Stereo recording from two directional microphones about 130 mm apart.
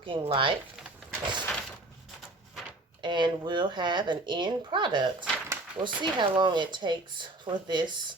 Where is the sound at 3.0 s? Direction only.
35° right (ahead or behind).